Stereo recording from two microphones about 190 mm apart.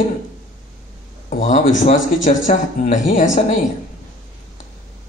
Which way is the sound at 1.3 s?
45° left (ahead or behind).